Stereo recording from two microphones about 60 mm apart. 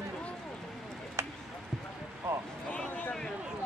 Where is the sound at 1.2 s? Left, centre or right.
Right.